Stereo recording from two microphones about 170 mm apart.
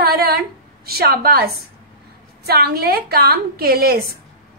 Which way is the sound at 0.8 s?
65° right (ahead or behind).